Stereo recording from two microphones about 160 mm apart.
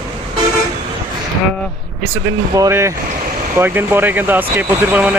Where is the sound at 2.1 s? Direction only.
20° right (ahead or behind).